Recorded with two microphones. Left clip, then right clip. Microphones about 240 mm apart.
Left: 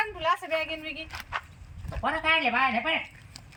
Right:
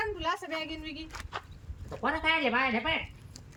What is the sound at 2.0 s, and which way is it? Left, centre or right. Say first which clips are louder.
Speech: left 3 dB; centre.